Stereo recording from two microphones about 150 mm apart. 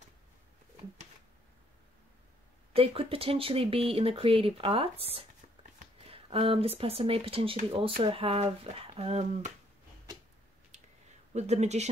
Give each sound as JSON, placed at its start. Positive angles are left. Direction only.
{"t": 2.7, "sound": "speech", "side_deg": -40}
{"t": 11.3, "sound": "speech", "side_deg": -45}